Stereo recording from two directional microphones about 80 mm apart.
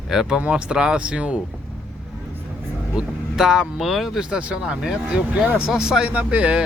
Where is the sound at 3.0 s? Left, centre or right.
Centre.